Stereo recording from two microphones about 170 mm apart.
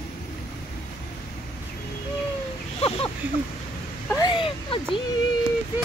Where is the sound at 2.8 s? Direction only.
30° left (ahead or behind).